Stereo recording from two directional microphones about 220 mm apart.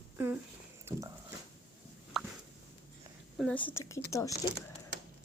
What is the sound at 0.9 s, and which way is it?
Speech, 10° right (ahead or behind).